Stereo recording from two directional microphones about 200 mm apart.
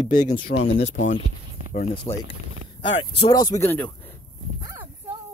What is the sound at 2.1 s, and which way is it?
Speech, 25° left (ahead or behind).